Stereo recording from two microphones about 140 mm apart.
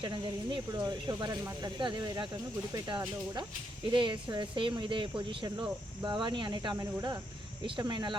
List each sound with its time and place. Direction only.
0.0 s speech: 35° right (ahead or behind)